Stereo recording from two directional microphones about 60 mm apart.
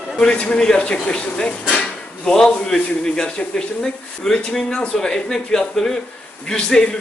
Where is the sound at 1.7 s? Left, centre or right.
Centre.